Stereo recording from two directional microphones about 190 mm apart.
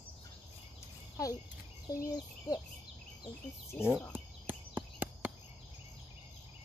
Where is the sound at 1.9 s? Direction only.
20° left (ahead or behind).